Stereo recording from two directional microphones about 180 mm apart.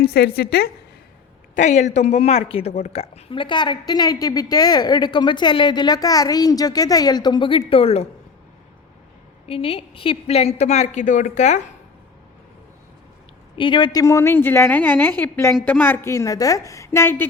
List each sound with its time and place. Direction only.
0.0 s a woman's voice: 60° left (ahead or behind)
1.5 s a woman's voice: 40° left (ahead or behind)
9.5 s a woman's voice: 30° left (ahead or behind)
13.6 s a woman's voice: 25° left (ahead or behind)